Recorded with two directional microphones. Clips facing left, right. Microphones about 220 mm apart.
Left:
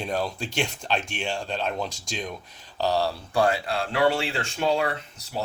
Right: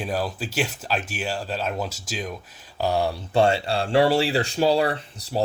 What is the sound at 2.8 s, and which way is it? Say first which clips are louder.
Speech: right 1 dB; 15° right (ahead or behind).